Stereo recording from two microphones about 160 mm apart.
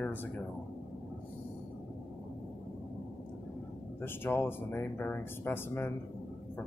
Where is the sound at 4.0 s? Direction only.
15° left (ahead or behind).